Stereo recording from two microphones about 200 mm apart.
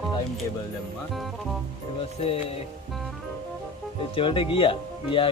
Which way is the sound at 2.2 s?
30° left (ahead or behind).